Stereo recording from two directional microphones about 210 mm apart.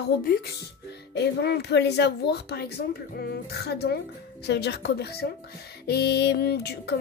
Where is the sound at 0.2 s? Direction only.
45° left (ahead or behind).